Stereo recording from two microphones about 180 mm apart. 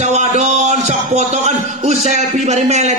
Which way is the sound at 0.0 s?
40° right (ahead or behind).